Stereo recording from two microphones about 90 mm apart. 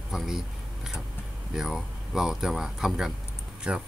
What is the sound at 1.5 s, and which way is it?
Speech, 5° right (ahead or behind).